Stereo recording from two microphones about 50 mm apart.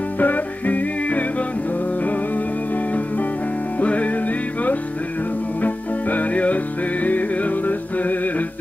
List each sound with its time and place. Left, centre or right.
0.2 s music: left
3.8 s music: left
5.6 s music: left